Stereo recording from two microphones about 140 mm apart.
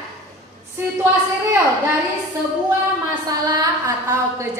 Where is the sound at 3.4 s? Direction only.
30° right (ahead or behind).